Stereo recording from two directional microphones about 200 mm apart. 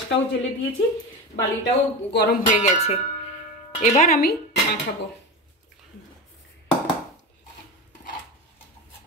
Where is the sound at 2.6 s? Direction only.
35° left (ahead or behind).